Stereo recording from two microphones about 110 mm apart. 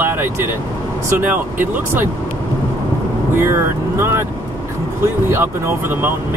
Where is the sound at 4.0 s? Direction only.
20° right (ahead or behind).